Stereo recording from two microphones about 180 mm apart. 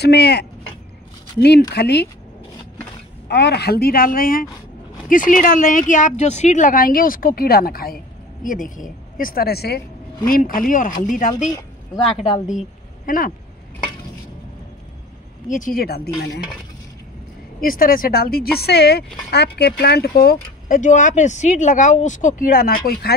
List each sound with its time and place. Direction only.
0.0 s speech: 65° left (ahead or behind)
1.7 s speech: 70° left (ahead or behind)
3.3 s a woman's voice: 70° left (ahead or behind); by 13.3 s 50° left (ahead or behind)
15.4 s speech: 45° left (ahead or behind)
17.6 s speech: 55° left (ahead or behind)